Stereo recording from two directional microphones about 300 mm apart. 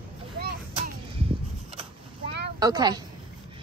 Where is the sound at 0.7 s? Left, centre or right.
Centre.